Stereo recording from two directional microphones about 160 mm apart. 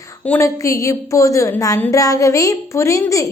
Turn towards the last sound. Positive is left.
turn(degrees=20)  # may be behind; listen again after turning